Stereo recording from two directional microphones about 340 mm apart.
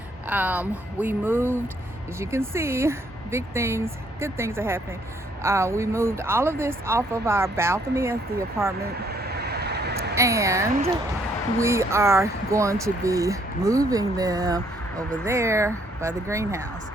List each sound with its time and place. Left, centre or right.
0.3 s speech: centre
8.3 s speech: right
9.0 s vehicle: right
10.2 s speech: centre